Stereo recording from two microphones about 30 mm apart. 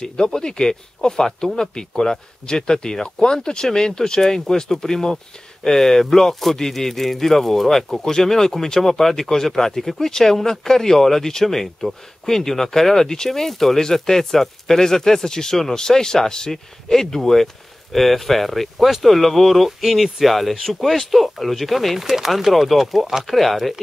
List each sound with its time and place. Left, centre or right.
0.0 s speech: left; by 23.7 s centre